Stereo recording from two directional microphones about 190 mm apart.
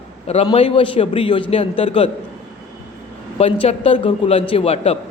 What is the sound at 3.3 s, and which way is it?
A man's voice, 30° left (ahead or behind).